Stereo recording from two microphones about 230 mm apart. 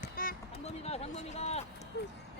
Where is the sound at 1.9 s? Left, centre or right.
Left.